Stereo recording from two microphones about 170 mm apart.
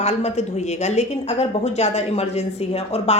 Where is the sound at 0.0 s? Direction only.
40° left (ahead or behind).